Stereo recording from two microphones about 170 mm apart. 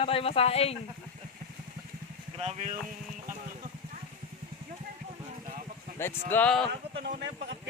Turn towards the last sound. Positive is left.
turn(degrees=-90)